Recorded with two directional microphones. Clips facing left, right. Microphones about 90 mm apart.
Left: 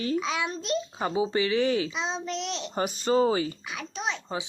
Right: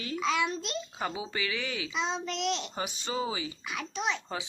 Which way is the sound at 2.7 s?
45° left (ahead or behind).